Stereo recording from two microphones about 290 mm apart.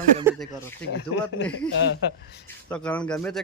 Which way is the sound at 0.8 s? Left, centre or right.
Left.